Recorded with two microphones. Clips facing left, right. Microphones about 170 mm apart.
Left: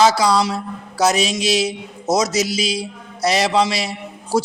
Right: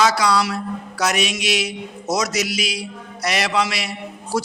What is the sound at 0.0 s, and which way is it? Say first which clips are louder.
A man's voice: left 3 dB; 25° left (ahead or behind).